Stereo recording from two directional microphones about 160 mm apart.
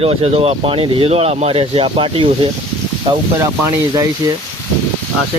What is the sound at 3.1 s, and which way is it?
Speech, 15° right (ahead or behind).